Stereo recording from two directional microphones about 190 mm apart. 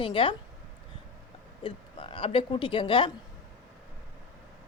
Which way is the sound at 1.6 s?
30° left (ahead or behind).